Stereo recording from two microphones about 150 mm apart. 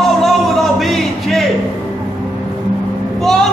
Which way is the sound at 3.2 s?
5° left (ahead or behind).